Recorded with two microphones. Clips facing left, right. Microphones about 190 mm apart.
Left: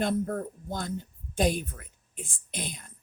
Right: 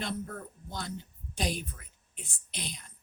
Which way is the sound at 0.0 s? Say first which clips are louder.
Left 9 dB; 50° left (ahead or behind).